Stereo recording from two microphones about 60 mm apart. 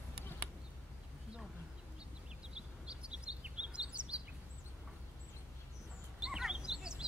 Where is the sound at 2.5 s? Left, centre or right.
Centre.